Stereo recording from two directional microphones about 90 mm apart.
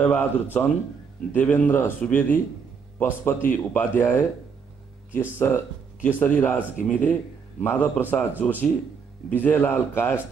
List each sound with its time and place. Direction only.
0.0 s speech: 15° left (ahead or behind)